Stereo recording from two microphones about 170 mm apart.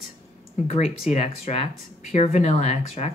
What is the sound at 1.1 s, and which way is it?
Speech, 40° left (ahead or behind).